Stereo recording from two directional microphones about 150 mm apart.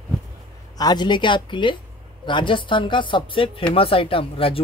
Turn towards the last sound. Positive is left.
turn(degrees=35)  # may be behind; listen again after turning